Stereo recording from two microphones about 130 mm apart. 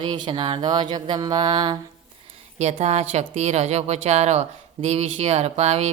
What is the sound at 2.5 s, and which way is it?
A woman's voice, 60° right (ahead or behind).